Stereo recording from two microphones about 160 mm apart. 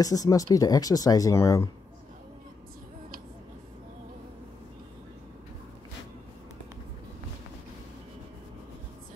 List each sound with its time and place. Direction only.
0.0 s speech: 20° left (ahead or behind)